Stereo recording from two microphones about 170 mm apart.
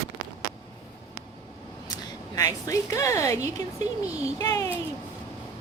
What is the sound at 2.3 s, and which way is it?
A woman's voice, 20° left (ahead or behind).